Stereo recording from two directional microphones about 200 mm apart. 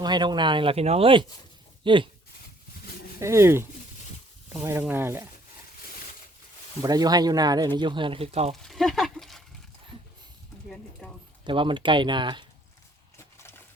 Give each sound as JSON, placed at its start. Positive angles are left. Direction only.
{"t": 0.0, "sound": "speech", "side_deg": -20}
{"t": 3.2, "sound": "speech", "side_deg": -15}
{"t": 6.8, "sound": "speech", "side_deg": -20}
{"t": 8.6, "sound": "a sound", "side_deg": 0}
{"t": 11.0, "sound": "speech", "side_deg": 5}
{"t": 11.4, "sound": "speech", "side_deg": -25}
{"t": 13.1, "sound": "a sound", "side_deg": 15}